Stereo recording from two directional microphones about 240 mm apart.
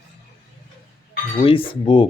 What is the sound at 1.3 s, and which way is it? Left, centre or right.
Speech, left.